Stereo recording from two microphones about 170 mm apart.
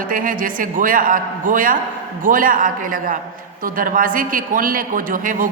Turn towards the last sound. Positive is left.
turn(degrees=-55)  # may be behind; listen again after turning